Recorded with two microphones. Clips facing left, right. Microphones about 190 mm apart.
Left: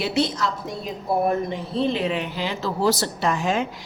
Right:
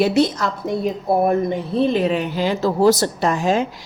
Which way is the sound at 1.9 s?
40° right (ahead or behind).